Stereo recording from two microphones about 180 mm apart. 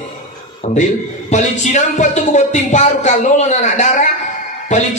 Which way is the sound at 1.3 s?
40° left (ahead or behind).